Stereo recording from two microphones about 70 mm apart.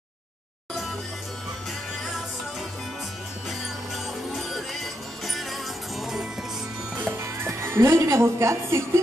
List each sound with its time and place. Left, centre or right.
3.4 s music: centre
7.2 s a woman's voice: right